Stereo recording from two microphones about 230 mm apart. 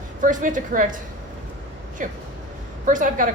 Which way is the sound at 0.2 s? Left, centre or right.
Right.